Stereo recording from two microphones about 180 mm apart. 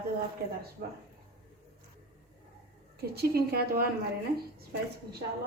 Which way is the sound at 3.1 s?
60° right (ahead or behind).